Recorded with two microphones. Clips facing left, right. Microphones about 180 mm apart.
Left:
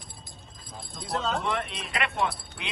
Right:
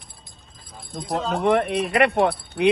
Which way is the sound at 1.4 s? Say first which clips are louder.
Right 12 dB; 60° right (ahead or behind).